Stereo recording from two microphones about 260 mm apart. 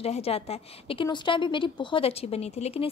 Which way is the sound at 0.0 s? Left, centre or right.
Left.